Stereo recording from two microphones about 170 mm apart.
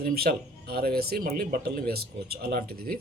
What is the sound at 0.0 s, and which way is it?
Speech, 65° right (ahead or behind).